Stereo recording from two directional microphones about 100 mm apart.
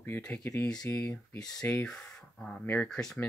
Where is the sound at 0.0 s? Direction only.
25° left (ahead or behind).